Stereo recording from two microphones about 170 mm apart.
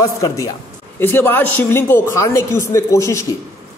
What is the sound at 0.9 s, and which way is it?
A woman's voice, 10° left (ahead or behind).